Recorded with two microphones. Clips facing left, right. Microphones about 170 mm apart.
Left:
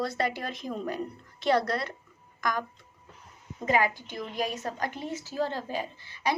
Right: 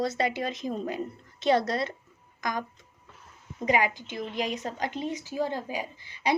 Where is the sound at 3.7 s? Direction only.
15° right (ahead or behind).